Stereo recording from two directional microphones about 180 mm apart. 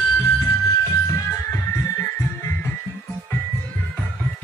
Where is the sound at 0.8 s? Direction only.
15° left (ahead or behind).